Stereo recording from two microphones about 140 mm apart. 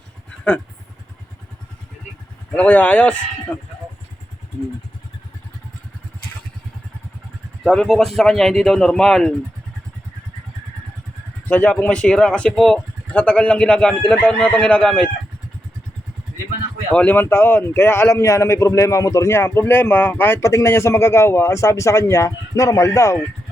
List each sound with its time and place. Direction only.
2.6 s speech: 10° left (ahead or behind)
7.6 s speech: centre (ahead or behind)
11.4 s speech: 10° left (ahead or behind)
16.9 s a man's voice: 10° left (ahead or behind)